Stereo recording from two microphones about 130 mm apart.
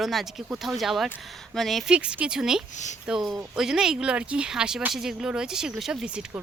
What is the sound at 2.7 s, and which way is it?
Speech, 65° left (ahead or behind).